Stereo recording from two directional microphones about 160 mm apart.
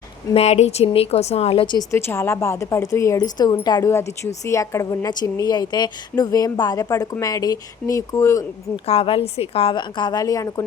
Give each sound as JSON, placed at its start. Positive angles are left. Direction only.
{"t": 0.3, "sound": "a woman's voice", "side_deg": 40}
{"t": 2.0, "sound": "a woman's voice", "side_deg": 15}
{"t": 8.7, "sound": "a woman's voice", "side_deg": 35}